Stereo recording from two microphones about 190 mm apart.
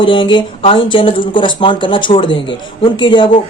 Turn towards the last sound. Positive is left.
turn(degrees=25)  # may be behind; listen again after turning